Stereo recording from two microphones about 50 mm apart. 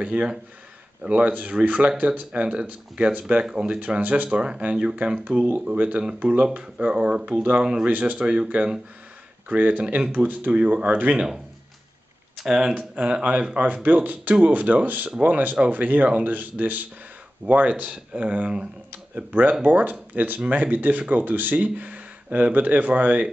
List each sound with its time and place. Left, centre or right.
0.0 s speech: right
3.4 s speech: centre
9.5 s speech: right
12.4 s speech: centre
19.6 s speech: right